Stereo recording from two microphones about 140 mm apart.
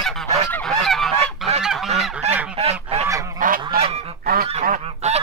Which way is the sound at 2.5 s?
45° right (ahead or behind).